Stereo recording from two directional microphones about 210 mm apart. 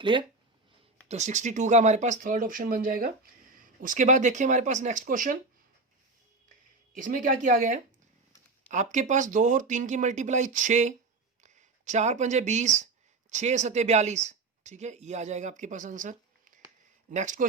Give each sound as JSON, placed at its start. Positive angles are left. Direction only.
{"t": 0.0, "sound": "speech", "side_deg": -25}
{"t": 1.0, "sound": "speech", "side_deg": -35}
{"t": 6.9, "sound": "speech", "side_deg": -40}